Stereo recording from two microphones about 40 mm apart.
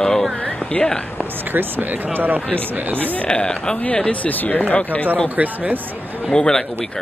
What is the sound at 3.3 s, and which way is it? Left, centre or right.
Speech, left.